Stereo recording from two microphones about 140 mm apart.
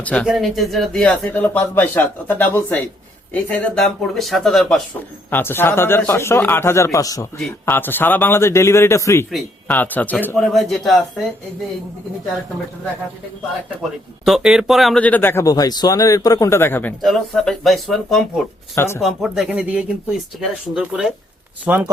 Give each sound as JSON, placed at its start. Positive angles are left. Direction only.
{"t": 0.0, "sound": "speech", "side_deg": 10}
{"t": 0.3, "sound": "speech", "side_deg": 0}
{"t": 5.3, "sound": "speech", "side_deg": 15}
{"t": 10.3, "sound": "speech", "side_deg": 0}
{"t": 14.3, "sound": "speech", "side_deg": -5}
{"t": 15.0, "sound": "speech", "side_deg": 15}
{"t": 15.4, "sound": "speech", "side_deg": 25}
{"t": 17.0, "sound": "speech", "side_deg": 0}
{"t": 18.7, "sound": "speech", "side_deg": 20}
{"t": 19.0, "sound": "speech", "side_deg": -5}